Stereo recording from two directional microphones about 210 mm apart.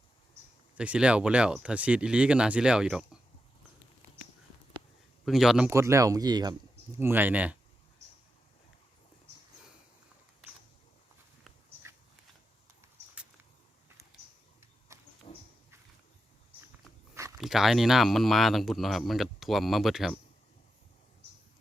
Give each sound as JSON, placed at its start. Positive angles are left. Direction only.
{"t": 0.8, "sound": "speech", "side_deg": -5}
{"t": 5.2, "sound": "speech", "side_deg": 0}
{"t": 5.7, "sound": "speech", "side_deg": -15}
{"t": 14.1, "sound": "a sound", "side_deg": 0}
{"t": 14.9, "sound": "a sound", "side_deg": -15}
{"t": 15.3, "sound": "dog", "side_deg": 35}
{"t": 17.4, "sound": "speech", "side_deg": 0}